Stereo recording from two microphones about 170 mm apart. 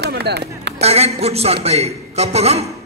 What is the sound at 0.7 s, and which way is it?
A man's voice, 40° right (ahead or behind).